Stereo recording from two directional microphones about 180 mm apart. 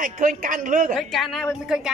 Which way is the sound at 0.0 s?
45° right (ahead or behind).